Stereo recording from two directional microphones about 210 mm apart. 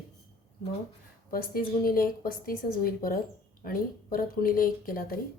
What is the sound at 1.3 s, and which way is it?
Speech, 45° left (ahead or behind).